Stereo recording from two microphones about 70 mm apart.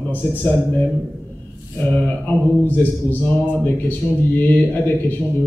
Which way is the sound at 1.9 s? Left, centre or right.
Left.